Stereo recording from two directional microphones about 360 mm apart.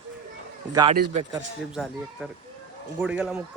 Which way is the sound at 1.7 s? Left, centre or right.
Centre.